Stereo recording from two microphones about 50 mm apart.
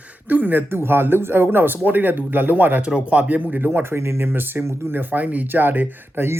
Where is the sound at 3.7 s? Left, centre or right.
Right.